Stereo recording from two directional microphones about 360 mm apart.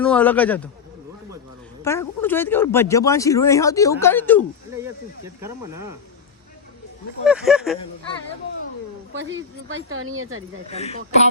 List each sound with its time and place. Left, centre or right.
0.0 s a man's voice: centre
1.8 s a man's voice: centre
7.3 s a man's voice: centre
9.1 s speech: right
10.7 s speech: centre